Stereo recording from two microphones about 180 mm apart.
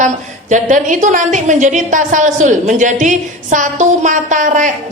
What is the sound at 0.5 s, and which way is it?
A woman's voice, 45° right (ahead or behind).